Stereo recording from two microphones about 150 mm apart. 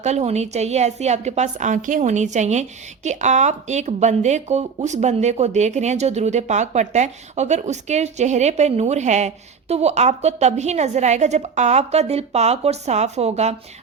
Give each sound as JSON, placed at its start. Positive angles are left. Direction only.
{"t": 0.0, "sound": "a woman's voice", "side_deg": -50}